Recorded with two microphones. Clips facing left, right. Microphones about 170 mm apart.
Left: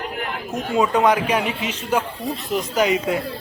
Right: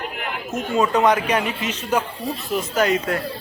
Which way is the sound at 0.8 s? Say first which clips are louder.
Even; 10° left (ahead or behind).